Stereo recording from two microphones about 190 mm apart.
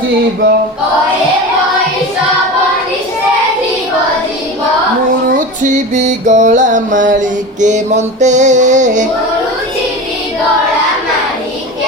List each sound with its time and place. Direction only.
5.6 s music: 40° right (ahead or behind)